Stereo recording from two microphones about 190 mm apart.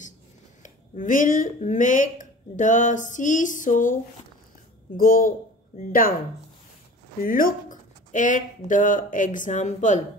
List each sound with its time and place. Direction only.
0.6 s speech: 45° left (ahead or behind)
4.9 s speech: 45° left (ahead or behind)
7.2 s speech: 45° left (ahead or behind)